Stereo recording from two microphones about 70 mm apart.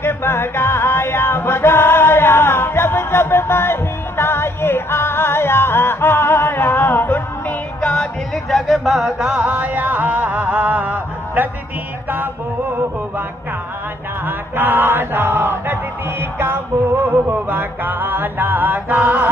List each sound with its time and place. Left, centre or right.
0.0 s music: left
7.8 s music: centre
8.5 s music: centre; by 11.4 s right
14.2 s chant: right